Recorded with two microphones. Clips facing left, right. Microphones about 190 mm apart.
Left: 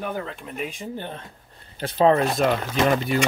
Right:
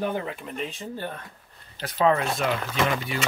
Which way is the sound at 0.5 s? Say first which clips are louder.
Left 5 dB; 10° left (ahead or behind).